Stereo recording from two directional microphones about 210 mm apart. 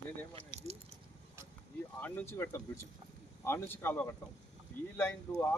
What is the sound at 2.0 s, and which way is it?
Speech, 10° left (ahead or behind).